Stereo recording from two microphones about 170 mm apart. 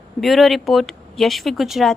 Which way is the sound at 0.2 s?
Centre (ahead or behind).